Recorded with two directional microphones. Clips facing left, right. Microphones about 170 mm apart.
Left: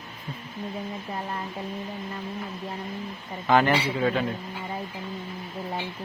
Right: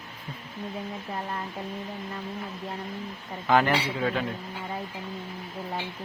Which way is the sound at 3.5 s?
5° left (ahead or behind).